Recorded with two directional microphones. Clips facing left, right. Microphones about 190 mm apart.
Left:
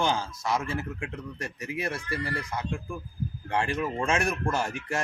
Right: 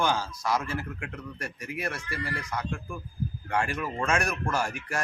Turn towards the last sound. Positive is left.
turn(degrees=25)  # may be behind; listen again after turning